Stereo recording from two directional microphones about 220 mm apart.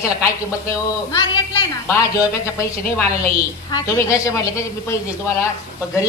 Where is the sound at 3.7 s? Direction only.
15° left (ahead or behind).